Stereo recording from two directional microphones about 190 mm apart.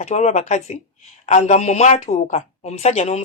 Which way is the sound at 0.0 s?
35° left (ahead or behind).